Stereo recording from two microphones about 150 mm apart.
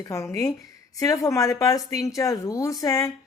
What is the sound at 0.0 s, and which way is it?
Speech, 20° left (ahead or behind).